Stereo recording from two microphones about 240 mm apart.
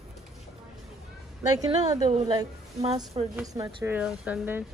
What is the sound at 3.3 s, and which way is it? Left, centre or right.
Speech, centre.